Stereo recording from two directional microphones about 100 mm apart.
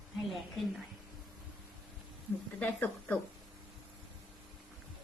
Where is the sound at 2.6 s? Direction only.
20° left (ahead or behind).